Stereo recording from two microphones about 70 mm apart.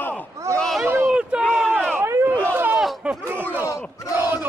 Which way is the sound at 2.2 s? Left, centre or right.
Right.